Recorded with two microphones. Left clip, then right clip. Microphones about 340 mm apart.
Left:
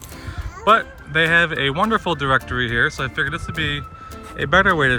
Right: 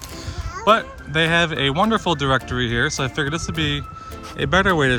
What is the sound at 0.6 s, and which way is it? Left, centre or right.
Speech, centre.